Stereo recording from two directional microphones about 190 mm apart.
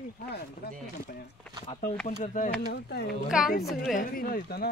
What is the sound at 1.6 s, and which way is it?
Speech, 40° left (ahead or behind).